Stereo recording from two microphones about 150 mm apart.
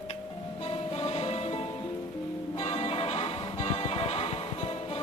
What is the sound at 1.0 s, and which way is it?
Music, 45° left (ahead or behind).